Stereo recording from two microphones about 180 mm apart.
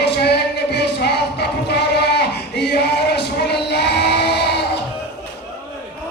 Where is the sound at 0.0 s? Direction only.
65° left (ahead or behind).